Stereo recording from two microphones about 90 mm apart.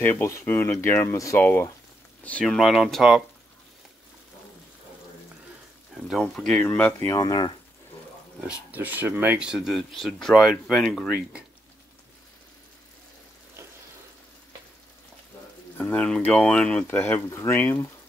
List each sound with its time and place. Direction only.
0.0 s speech: 25° left (ahead or behind)
1.1 s speech: 35° left (ahead or behind)
2.4 s speech: centre (ahead or behind)
5.9 s speech: centre (ahead or behind)
6.6 s speech: 20° left (ahead or behind)
7.1 s speech: 45° left (ahead or behind)
8.5 s speech: 20° right (ahead or behind)
9.4 s speech: 5° right (ahead or behind)
15.9 s speech: 15° left (ahead or behind)
16.8 s speech: 25° left (ahead or behind)
17.6 s speech: 20° left (ahead or behind)